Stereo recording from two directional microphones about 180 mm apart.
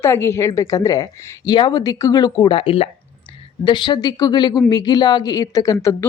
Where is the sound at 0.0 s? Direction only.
15° left (ahead or behind).